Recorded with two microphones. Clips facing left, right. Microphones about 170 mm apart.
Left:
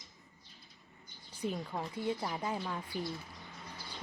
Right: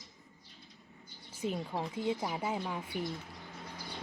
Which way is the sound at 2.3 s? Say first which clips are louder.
Right 2 dB; 10° right (ahead or behind).